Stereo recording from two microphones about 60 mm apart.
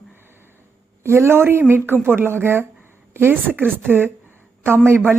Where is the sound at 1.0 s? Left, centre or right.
Right.